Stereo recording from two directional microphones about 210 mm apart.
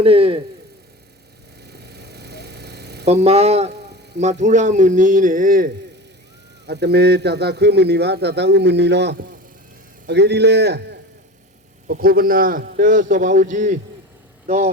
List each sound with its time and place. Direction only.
0.0 s speech: 25° right (ahead or behind)
1.6 s a sound: 50° right (ahead or behind)
3.1 s a man's voice: 30° right (ahead or behind)